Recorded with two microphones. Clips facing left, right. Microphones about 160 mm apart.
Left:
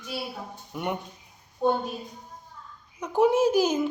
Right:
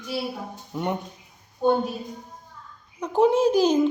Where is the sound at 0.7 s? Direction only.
25° right (ahead or behind).